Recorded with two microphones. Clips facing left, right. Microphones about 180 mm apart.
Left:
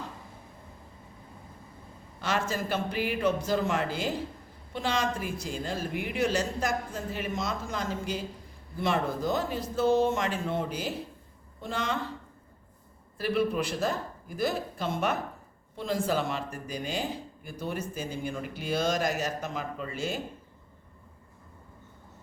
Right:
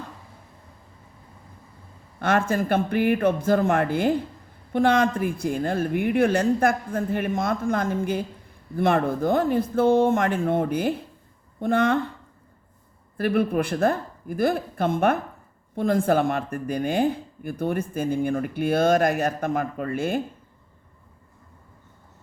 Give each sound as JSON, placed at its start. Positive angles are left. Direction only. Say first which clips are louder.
{"t": 2.1, "sound": "speech", "louder": "right 8 dB", "side_deg": -55}
{"t": 13.1, "sound": "speech", "louder": "right 5 dB", "side_deg": -55}